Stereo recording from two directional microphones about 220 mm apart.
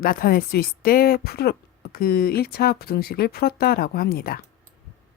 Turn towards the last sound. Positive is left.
turn(degrees=40)  # may be behind; listen again after turning